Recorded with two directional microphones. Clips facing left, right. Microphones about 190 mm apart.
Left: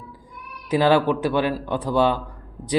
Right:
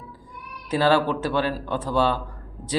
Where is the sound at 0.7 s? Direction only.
15° left (ahead or behind).